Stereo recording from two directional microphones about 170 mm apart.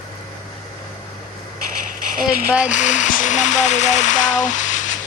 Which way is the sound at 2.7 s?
45° left (ahead or behind).